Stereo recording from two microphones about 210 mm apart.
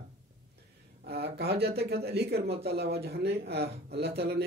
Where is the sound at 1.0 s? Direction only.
50° right (ahead or behind).